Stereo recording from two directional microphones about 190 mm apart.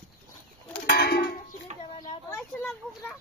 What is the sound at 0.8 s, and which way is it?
Music, 55° left (ahead or behind).